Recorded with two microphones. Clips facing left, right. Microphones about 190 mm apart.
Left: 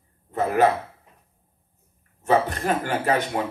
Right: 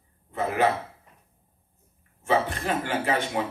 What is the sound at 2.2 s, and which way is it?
Speech, 45° left (ahead or behind).